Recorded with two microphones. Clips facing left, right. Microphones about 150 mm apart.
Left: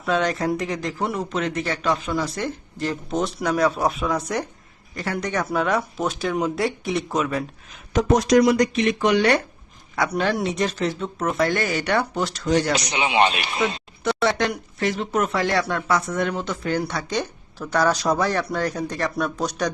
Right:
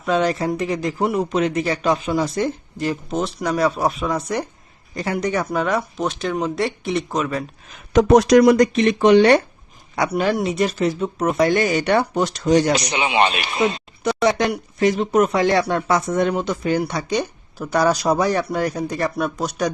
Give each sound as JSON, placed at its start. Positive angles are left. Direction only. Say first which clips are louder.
{"t": 0.0, "sound": "speech", "louder": "right 3 dB", "side_deg": 0}
{"t": 4.9, "sound": "speech", "louder": "right 4 dB", "side_deg": -15}
{"t": 5.5, "sound": "speech", "louder": "right 1 dB", "side_deg": 0}
{"t": 7.9, "sound": "speech", "louder": "right 5 dB", "side_deg": -70}
{"t": 8.7, "sound": "speech", "louder": "right 6 dB", "side_deg": -35}
{"t": 10.1, "sound": "speech", "louder": "right 4 dB", "side_deg": -5}
{"t": 12.9, "sound": "speech", "louder": "right 1 dB", "side_deg": -70}
{"t": 14.0, "sound": "speech", "louder": "right 3 dB", "side_deg": -15}